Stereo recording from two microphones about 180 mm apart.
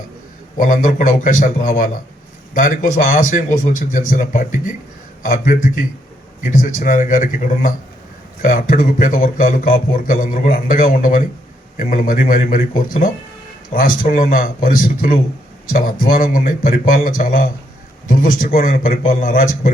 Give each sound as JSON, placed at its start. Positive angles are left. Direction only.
{"t": 0.5, "sound": "speech", "side_deg": 50}